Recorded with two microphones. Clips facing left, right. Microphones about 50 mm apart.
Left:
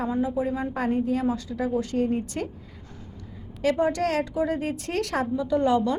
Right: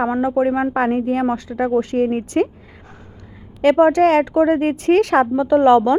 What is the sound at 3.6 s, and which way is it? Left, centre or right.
A woman's voice, right.